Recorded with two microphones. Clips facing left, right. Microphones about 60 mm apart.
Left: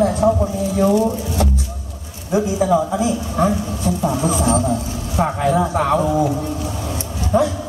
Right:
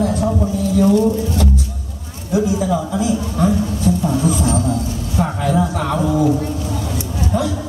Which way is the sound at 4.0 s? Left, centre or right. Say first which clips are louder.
Right 1 dB; centre.